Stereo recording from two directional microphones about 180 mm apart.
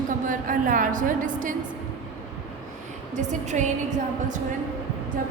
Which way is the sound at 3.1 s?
40° right (ahead or behind).